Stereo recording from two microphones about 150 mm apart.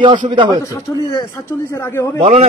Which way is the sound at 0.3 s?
30° right (ahead or behind).